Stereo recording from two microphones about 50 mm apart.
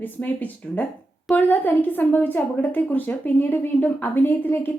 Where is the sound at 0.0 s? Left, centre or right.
Left.